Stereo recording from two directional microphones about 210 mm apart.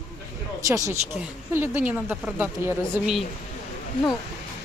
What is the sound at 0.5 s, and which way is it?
A woman's voice, 15° right (ahead or behind).